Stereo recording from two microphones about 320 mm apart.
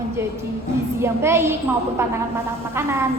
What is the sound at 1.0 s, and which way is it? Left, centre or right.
Speech, centre.